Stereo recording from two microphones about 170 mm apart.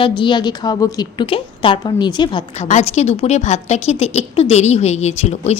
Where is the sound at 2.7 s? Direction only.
40° left (ahead or behind).